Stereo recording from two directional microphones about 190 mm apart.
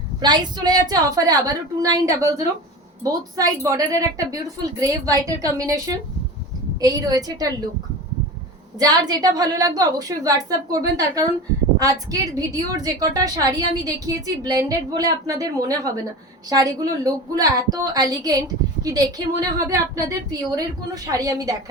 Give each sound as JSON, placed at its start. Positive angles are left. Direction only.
{"t": 0.2, "sound": "a woman's voice", "side_deg": -20}
{"t": 8.8, "sound": "a woman's voice", "side_deg": -20}